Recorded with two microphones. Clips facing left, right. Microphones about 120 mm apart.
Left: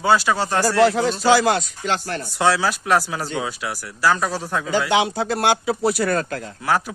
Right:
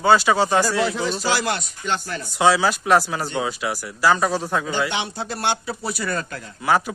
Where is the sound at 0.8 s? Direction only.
85° left.